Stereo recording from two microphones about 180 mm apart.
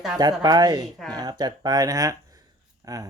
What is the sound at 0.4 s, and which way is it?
Speech, 20° right (ahead or behind).